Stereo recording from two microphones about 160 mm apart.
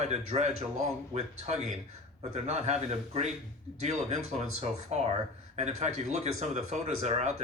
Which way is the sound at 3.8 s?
45° right (ahead or behind).